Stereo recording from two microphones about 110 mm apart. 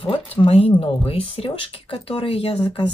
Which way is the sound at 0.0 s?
55° left (ahead or behind).